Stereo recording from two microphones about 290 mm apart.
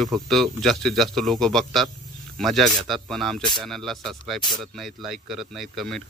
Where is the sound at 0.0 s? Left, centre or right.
Centre.